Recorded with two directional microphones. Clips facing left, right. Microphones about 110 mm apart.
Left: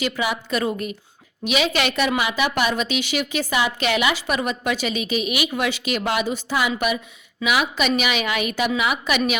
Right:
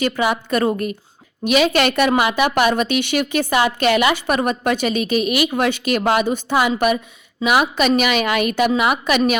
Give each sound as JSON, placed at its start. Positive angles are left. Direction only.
{"t": 0.0, "sound": "a woman's voice", "side_deg": -50}